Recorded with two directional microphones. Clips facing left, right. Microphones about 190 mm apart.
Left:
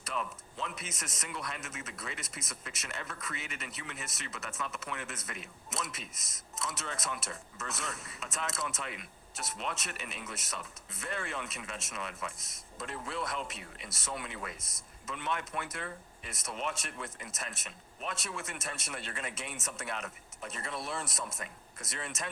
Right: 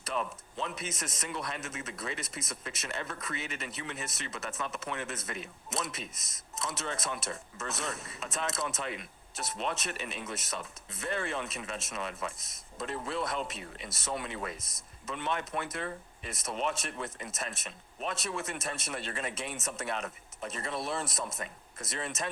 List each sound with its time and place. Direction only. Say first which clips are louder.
0.1 s speech: right 3 dB; 30° right (ahead or behind)